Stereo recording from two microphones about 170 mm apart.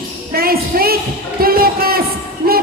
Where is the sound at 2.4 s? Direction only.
60° right (ahead or behind).